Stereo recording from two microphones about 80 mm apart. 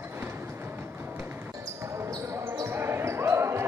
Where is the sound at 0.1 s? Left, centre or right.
Right.